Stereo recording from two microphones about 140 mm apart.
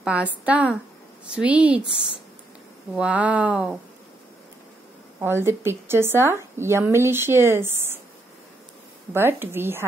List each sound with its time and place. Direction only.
0.0 s speech: 10° right (ahead or behind)
3.0 s speech: 10° right (ahead or behind)
5.2 s speech: 20° right (ahead or behind)
9.1 s speech: 15° right (ahead or behind)